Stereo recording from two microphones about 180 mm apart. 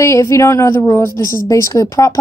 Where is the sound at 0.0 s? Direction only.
15° left (ahead or behind).